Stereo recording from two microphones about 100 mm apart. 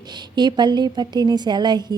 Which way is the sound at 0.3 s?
45° right (ahead or behind).